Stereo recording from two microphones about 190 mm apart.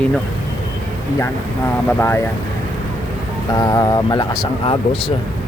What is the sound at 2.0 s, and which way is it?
Speech, 10° left (ahead or behind).